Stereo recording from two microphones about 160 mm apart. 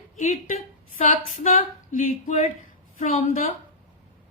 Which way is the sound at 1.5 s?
60° left (ahead or behind).